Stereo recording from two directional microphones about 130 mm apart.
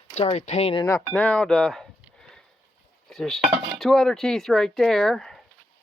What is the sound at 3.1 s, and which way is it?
Speech, 5° left (ahead or behind).